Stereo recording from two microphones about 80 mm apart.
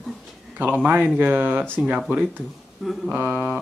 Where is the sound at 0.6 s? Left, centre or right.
Right.